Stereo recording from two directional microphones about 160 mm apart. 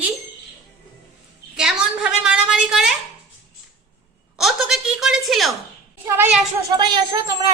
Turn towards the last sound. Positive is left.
turn(degrees=-25)  # may be behind; listen again after turning